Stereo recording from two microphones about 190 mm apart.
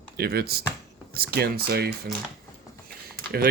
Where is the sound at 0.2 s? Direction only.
55° right (ahead or behind).